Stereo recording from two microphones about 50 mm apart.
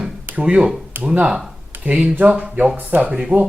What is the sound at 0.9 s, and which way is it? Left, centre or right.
Speech, right.